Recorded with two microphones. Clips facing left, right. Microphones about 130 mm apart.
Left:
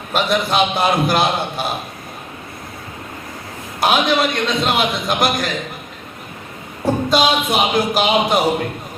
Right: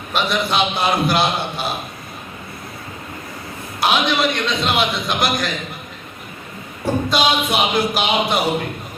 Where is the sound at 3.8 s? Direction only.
45° left (ahead or behind).